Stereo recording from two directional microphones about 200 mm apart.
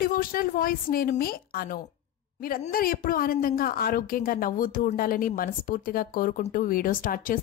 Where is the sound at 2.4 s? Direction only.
45° left (ahead or behind).